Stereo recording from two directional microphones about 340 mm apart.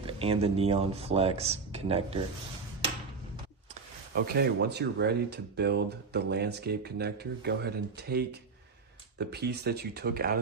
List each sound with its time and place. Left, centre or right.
0.0 s speech: centre
4.1 s speech: right